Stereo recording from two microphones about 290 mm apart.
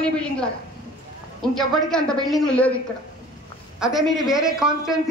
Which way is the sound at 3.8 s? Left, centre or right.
Centre.